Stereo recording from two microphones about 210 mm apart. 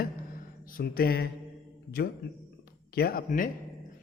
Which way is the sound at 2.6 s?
45° left (ahead or behind).